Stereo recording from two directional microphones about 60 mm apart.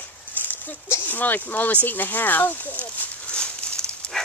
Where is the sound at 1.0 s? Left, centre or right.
Left.